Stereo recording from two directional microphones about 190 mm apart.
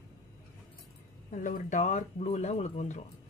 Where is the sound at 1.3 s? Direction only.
45° left (ahead or behind).